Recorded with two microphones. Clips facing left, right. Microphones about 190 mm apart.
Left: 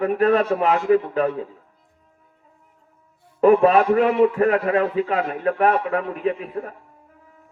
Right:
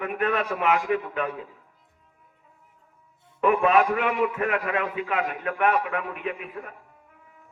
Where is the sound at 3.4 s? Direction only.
35° left (ahead or behind).